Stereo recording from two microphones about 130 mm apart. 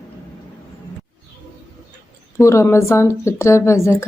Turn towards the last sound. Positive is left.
turn(degrees=20)  # may be behind; listen again after turning